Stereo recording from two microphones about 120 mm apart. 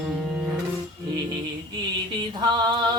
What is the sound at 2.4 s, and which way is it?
Music, 35° right (ahead or behind).